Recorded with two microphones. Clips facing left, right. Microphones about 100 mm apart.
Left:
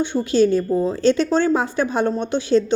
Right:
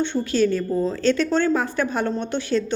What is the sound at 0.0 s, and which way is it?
A woman's voice, 15° left (ahead or behind).